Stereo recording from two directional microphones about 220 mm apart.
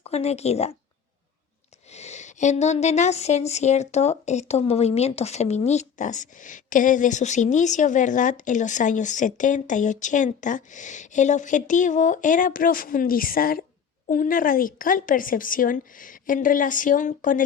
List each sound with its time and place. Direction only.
0.0 s speech: 30° left (ahead or behind)
1.9 s speech: 30° left (ahead or behind)